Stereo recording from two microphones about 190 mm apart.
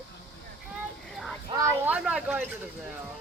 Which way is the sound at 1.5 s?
20° right (ahead or behind).